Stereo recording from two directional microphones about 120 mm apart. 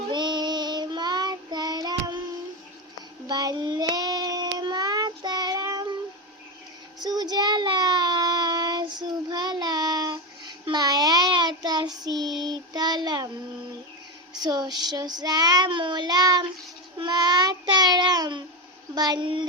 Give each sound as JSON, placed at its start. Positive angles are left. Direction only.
{"t": 0.1, "sound": "child singing", "side_deg": -40}
{"t": 3.2, "sound": "child singing", "side_deg": -35}
{"t": 7.0, "sound": "child singing", "side_deg": -35}
{"t": 14.3, "sound": "child singing", "side_deg": -35}
{"t": 18.9, "sound": "a child's voice", "side_deg": -35}